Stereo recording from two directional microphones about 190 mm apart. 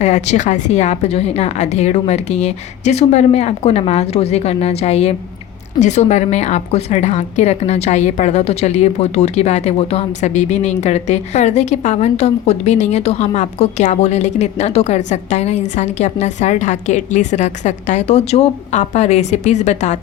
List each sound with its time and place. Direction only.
0.0 s a woman's voice: 35° left (ahead or behind)